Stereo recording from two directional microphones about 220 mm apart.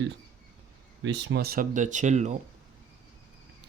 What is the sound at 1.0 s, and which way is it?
Speech, 55° right (ahead or behind).